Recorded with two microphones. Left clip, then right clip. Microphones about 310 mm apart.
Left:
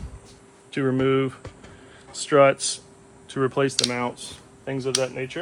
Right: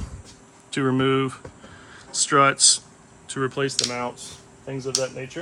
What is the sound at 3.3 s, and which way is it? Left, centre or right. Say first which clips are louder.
Speech: left 2 dB; centre.